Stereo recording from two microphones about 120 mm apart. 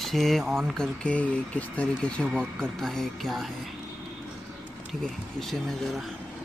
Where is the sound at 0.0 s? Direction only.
Centre (ahead or behind).